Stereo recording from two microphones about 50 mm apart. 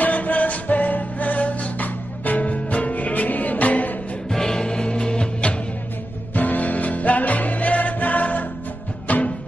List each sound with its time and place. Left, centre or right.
0.0 s music: left
4.3 s music: centre
6.3 s music: left